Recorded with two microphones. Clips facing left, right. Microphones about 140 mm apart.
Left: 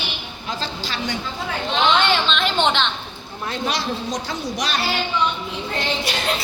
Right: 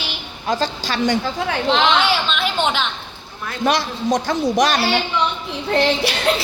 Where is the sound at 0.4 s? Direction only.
45° right (ahead or behind).